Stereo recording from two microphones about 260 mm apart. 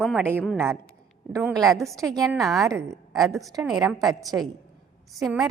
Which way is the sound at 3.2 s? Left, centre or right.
Centre.